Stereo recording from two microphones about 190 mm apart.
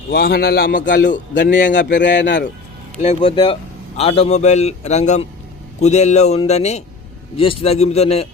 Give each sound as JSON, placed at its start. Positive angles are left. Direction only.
{"t": 0.1, "sound": "a man's voice", "side_deg": 55}
{"t": 1.3, "sound": "a man's voice", "side_deg": 65}
{"t": 3.0, "sound": "speech", "side_deg": 35}